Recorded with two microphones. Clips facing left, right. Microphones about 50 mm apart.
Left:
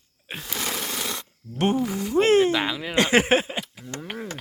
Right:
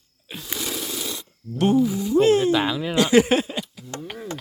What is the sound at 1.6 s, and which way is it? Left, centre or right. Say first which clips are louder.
Speech: right 4 dB; left.